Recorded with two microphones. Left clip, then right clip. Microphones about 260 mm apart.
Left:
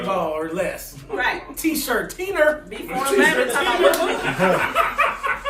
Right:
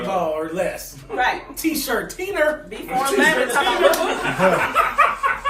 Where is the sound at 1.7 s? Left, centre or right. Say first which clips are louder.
Left 1 dB; centre.